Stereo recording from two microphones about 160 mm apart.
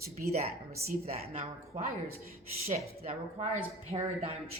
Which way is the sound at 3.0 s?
40° right (ahead or behind).